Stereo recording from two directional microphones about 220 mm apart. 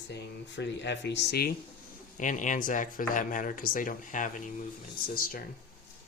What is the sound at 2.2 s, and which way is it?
Speech, 35° left (ahead or behind).